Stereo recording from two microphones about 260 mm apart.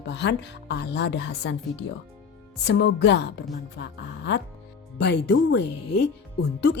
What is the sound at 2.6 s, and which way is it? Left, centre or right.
Speech, left.